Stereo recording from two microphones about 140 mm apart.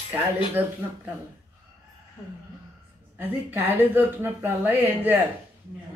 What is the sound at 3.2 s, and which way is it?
Speech, 15° right (ahead or behind).